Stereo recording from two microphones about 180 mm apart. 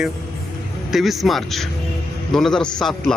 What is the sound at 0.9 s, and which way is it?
A man's voice, centre (ahead or behind).